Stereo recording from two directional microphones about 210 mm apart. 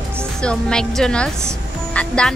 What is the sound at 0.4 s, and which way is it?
Speech, 5° left (ahead or behind).